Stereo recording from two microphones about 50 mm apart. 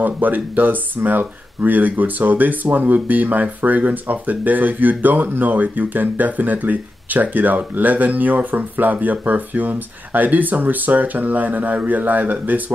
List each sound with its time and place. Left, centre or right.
0.0 s speech: right